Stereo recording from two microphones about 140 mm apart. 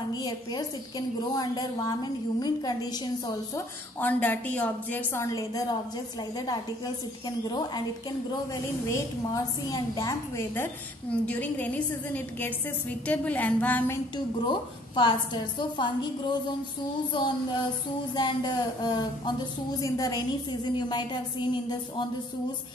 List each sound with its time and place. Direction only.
0.1 s a woman's voice: 30° left (ahead or behind)
4.0 s a woman's voice: 10° left (ahead or behind); by 7.8 s 30° left (ahead or behind)
8.8 s a woman's voice: 25° left (ahead or behind)
14.1 s a woman's voice: 35° left (ahead or behind)